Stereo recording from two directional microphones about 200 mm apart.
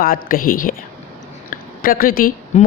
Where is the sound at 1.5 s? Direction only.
45° left (ahead or behind).